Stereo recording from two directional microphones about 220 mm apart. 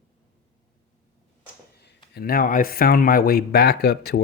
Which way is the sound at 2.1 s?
40° left (ahead or behind).